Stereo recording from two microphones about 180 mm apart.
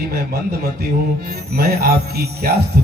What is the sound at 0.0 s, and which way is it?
A man's voice, 60° right (ahead or behind).